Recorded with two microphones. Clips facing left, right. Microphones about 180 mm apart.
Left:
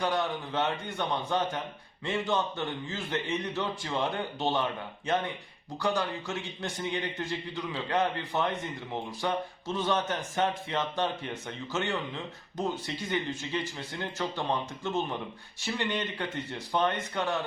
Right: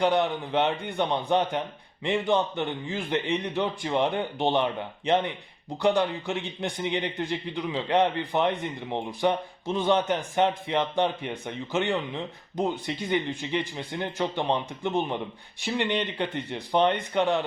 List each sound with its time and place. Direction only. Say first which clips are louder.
0.0 s a man's voice: right 6 dB; 20° right (ahead or behind)